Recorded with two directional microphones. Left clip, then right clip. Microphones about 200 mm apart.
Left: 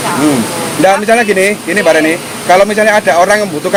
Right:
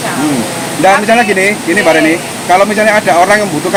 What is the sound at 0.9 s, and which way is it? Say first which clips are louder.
Speech: right 1 dB; 45° left (ahead or behind).